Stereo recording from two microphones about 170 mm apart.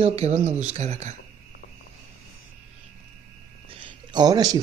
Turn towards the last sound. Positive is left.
turn(degrees=-20)  # may be behind; listen again after turning